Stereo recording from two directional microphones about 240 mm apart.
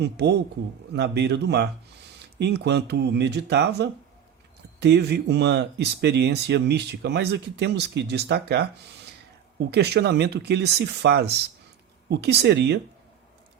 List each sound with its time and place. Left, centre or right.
0.0 s speech: right